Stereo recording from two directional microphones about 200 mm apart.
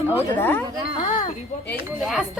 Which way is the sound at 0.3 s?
10° left (ahead or behind).